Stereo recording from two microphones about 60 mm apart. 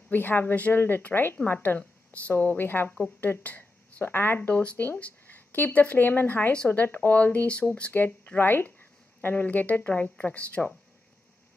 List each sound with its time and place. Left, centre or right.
0.1 s a woman's voice: left
4.4 s a woman's voice: left